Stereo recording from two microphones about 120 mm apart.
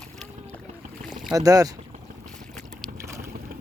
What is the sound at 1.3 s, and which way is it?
Speech, 30° right (ahead or behind).